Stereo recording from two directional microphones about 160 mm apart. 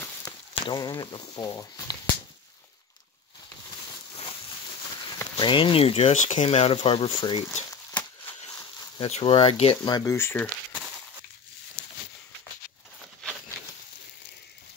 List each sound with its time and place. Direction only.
0.7 s speech: 25° left (ahead or behind)
5.4 s speech: 30° left (ahead or behind)
8.9 s speech: 35° left (ahead or behind)
10.1 s speech: 15° left (ahead or behind)
13.0 s a sound: centre (ahead or behind)